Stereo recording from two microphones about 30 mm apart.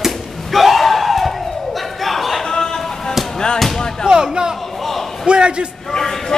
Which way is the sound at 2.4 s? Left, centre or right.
Left.